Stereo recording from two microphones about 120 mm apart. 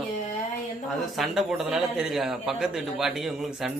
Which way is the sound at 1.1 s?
Centre (ahead or behind).